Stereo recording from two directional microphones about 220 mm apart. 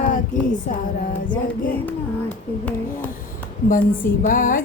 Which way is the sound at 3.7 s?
40° left (ahead or behind).